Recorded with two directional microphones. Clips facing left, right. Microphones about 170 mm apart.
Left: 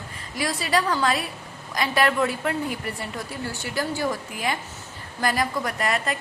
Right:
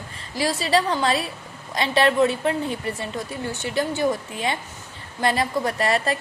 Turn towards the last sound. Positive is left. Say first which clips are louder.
# right 4 dB
turn(degrees=-30)  # may be behind; listen again after turning